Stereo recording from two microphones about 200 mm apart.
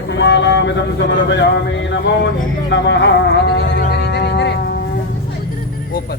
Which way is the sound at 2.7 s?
65° left (ahead or behind).